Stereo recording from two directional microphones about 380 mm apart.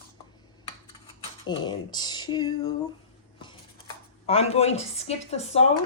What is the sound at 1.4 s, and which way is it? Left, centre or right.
Speech, centre.